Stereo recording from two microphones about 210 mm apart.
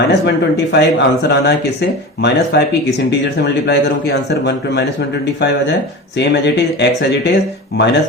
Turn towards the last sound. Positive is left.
turn(degrees=50)  # may be behind; listen again after turning